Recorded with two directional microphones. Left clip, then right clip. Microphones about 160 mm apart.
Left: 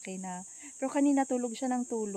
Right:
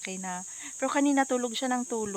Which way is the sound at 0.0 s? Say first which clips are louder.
Right 5 dB; 5° left (ahead or behind).